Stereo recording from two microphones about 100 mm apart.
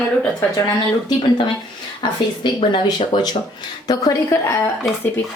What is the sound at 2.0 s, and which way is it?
Speech, 50° left (ahead or behind).